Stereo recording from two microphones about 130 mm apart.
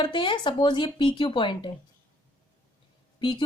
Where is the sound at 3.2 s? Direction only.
35° left (ahead or behind).